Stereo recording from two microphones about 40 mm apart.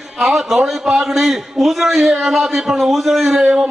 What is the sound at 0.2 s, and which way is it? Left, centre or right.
A man's voice, centre.